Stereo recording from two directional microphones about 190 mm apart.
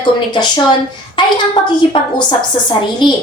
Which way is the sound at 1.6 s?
25° left (ahead or behind).